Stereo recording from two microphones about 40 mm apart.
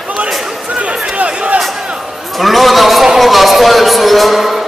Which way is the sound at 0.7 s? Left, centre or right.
Right.